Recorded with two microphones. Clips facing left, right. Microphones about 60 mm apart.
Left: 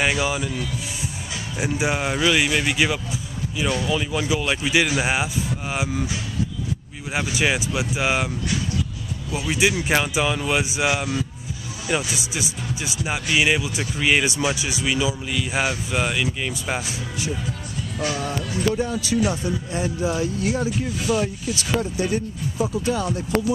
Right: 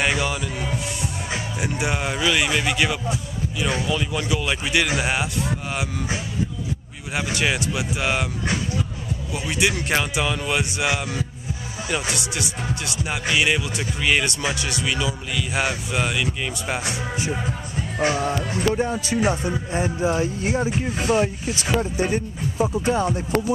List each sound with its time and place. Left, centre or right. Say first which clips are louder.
0.0 s speech: left 1 dB; centre
0.5 s speech: right 1 dB; right
1.6 s speech: left 4 dB; centre
7.2 s speech: left 1 dB; centre
9.3 s speech: left 2 dB; centre
12.2 s speech: right 1 dB; centre
17.2 s speech: right 2 dB; right